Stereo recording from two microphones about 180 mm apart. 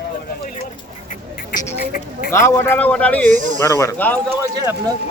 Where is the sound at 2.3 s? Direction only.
15° left (ahead or behind).